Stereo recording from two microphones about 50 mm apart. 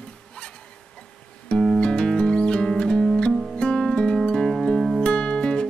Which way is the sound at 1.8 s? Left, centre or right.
Centre.